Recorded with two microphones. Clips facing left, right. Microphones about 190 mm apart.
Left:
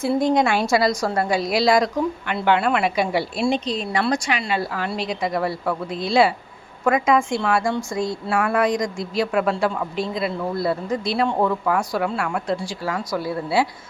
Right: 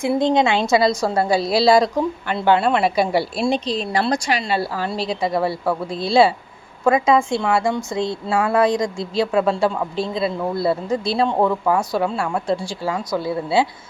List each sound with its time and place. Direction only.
0.0 s a woman's voice: 15° right (ahead or behind)